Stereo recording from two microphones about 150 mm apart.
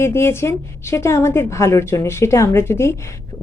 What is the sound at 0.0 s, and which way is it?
A woman's voice, 15° left (ahead or behind).